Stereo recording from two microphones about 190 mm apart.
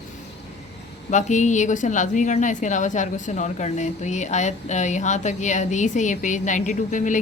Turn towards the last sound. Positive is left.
turn(degrees=40)  # may be behind; listen again after turning